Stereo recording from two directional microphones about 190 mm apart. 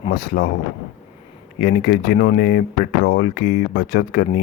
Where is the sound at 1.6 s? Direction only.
50° left (ahead or behind).